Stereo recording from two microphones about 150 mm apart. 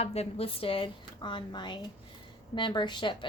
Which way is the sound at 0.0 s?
45° left (ahead or behind).